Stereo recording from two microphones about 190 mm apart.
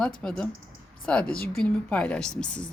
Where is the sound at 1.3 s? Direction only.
50° left (ahead or behind).